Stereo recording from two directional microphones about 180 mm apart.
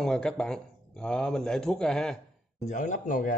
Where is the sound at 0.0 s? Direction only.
Centre (ahead or behind).